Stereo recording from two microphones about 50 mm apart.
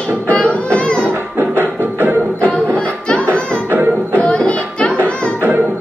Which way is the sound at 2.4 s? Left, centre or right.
Left.